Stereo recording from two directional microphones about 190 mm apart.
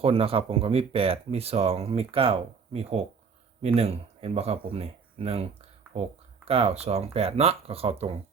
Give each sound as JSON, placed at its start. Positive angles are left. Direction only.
{"t": 0.0, "sound": "speech", "side_deg": -30}